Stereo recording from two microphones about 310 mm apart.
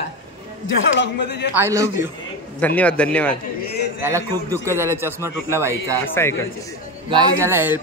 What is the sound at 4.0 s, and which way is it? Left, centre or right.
Speech, centre.